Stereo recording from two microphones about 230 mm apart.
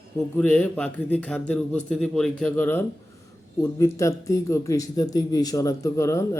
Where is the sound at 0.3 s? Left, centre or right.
Centre.